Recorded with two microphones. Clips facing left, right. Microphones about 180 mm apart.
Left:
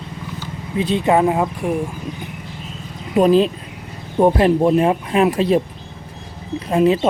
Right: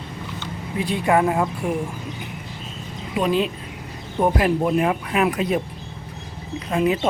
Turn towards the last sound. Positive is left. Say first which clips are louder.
# left 5 dB
turn(degrees=30)  # may be behind; listen again after turning